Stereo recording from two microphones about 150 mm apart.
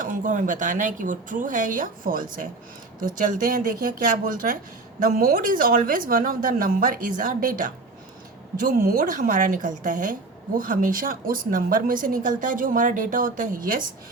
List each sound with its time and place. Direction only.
0.0 s a woman's voice: 60° right (ahead or behind)